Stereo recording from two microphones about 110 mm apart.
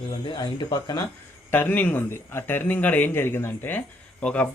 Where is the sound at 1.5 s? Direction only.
20° left (ahead or behind).